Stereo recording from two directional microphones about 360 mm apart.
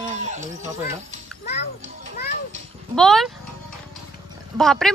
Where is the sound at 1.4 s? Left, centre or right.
Left.